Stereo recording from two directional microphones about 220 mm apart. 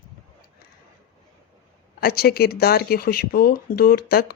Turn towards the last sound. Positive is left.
turn(degrees=45)  # may be behind; listen again after turning